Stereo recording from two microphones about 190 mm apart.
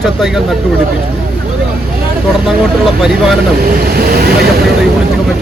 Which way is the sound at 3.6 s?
50° right (ahead or behind).